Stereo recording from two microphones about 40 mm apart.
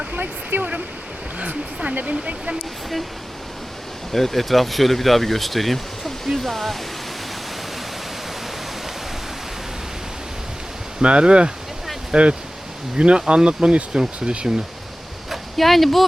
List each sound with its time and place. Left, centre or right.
0.1 s waterfall: right
1.4 s a sound: right
2.0 s speech: right
4.1 s speech: centre
11.0 s speech: right
15.3 s a sound: centre